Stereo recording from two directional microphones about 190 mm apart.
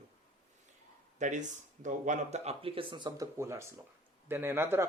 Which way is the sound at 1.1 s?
40° right (ahead or behind).